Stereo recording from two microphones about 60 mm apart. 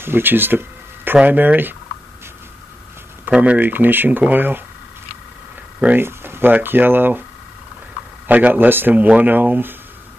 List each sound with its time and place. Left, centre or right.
0.0 s speech: right
3.3 s speech: centre
3.5 s speech: right
5.9 s a sound: right
6.5 s speech: right
8.3 s speech: right